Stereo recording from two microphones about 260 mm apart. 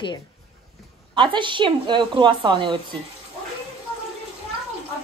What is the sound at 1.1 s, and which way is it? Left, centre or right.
A woman's voice, centre.